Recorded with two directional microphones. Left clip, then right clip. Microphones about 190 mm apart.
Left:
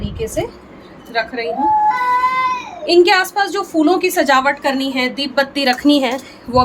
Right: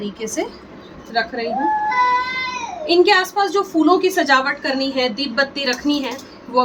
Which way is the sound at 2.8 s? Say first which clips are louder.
Left 3 dB; 55° left (ahead or behind).